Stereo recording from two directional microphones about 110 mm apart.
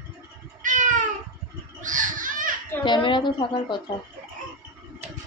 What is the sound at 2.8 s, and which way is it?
Speech, 45° left (ahead or behind).